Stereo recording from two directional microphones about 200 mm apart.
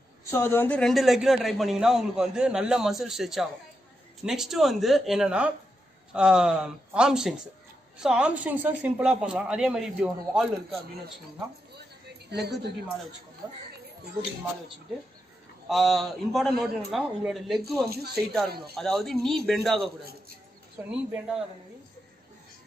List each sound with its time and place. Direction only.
0.3 s a man's voice: 10° left (ahead or behind); by 10.8 s 5° right (ahead or behind)
12.3 s a woman's voice: 55° right (ahead or behind)
15.7 s a man's voice: centre (ahead or behind)
17.8 s speech: 50° right (ahead or behind)
18.8 s a man's voice: centre (ahead or behind)
20.9 s a man's voice: 5° right (ahead or behind)